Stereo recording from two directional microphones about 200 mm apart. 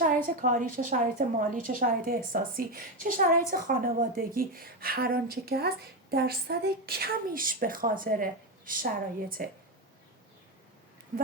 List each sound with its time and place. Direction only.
0.0 s a woman's voice: 45° right (ahead or behind)